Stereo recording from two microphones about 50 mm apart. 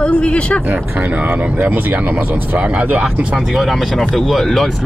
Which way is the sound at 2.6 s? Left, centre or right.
Right.